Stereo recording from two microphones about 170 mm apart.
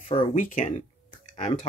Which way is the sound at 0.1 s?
30° left (ahead or behind).